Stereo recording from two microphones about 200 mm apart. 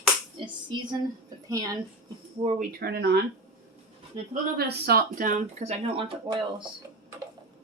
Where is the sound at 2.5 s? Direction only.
50° right (ahead or behind).